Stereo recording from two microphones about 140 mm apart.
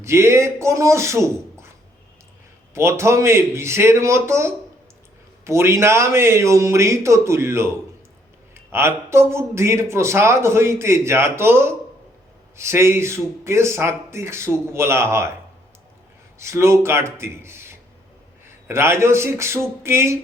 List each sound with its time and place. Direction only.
0.0 s a man's voice: 20° right (ahead or behind)
2.7 s a man's voice: 20° right (ahead or behind)
16.4 s a man's voice: 20° right (ahead or behind)